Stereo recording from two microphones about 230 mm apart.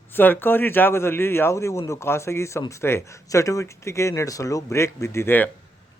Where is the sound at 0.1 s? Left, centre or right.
Centre.